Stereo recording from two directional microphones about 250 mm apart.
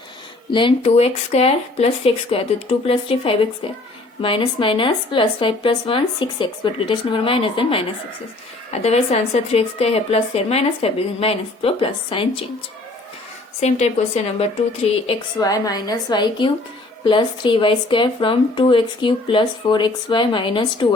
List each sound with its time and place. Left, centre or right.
0.5 s speech: left
13.6 s a woman's voice: left